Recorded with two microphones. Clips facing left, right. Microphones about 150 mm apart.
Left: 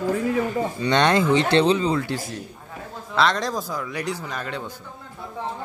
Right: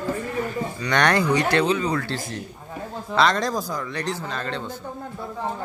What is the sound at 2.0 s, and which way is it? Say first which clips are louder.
Speech: left 1 dB; 10° left (ahead or behind).